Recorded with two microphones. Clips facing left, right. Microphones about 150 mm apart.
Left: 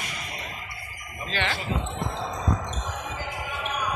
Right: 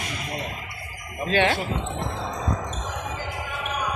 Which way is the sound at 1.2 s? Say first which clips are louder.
Right 8 dB; 60° right (ahead or behind).